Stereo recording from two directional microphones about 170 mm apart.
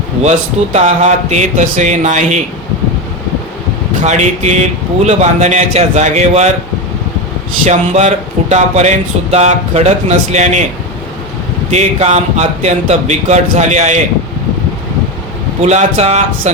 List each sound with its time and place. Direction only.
0.2 s speech: 40° right (ahead or behind)
4.0 s speech: 45° right (ahead or behind)
7.6 s speech: 40° right (ahead or behind)
11.7 s speech: 40° right (ahead or behind)
15.6 s speech: 45° right (ahead or behind)